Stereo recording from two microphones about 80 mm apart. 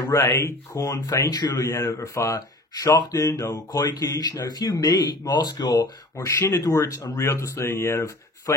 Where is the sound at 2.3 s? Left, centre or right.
Left.